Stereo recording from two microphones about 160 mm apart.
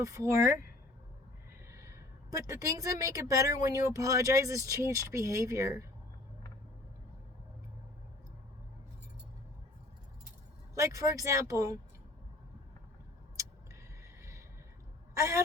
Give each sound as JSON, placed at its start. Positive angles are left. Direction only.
{"t": 0.0, "sound": "a woman's voice", "side_deg": -20}
{"t": 1.7, "sound": "a woman's voice", "side_deg": -20}
{"t": 10.8, "sound": "a woman's voice", "side_deg": -20}
{"t": 14.2, "sound": "a sound", "side_deg": -20}